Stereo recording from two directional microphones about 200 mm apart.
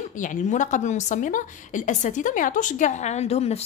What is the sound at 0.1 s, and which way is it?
A woman's voice, 40° left (ahead or behind).